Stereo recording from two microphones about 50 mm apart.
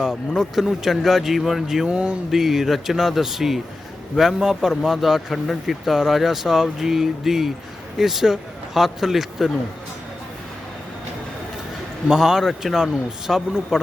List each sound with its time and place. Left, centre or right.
0.0 s speech: centre
1.9 s a sound: right
2.3 s speech: centre
12.0 s speech: centre